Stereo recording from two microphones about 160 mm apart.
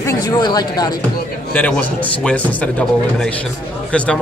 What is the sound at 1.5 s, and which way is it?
A man's voice, 10° left (ahead or behind).